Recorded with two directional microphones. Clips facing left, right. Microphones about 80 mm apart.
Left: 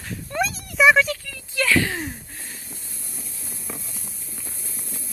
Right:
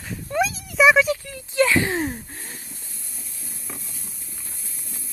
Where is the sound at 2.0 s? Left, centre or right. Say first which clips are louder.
Right 5 dB; right.